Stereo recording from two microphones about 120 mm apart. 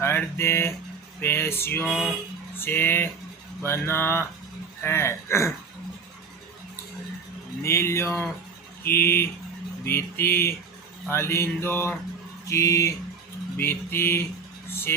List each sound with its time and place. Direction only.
0.0 s mantra: 20° left (ahead or behind)
2.6 s speech: 15° left (ahead or behind)
3.6 s mantra: 20° left (ahead or behind)
7.6 s mantra: 20° left (ahead or behind)
14.7 s vehicle: 20° left (ahead or behind)